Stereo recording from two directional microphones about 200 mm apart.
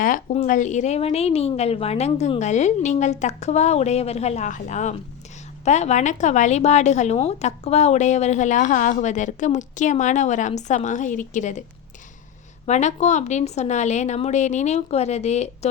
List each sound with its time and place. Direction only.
0.0 s a woman's voice: 40° left (ahead or behind)
12.6 s a woman's voice: 35° left (ahead or behind)